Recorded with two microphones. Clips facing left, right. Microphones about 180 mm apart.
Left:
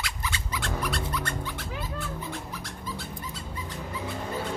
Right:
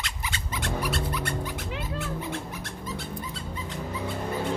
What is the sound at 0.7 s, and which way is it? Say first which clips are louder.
Music: right 2 dB; 5° right (ahead or behind).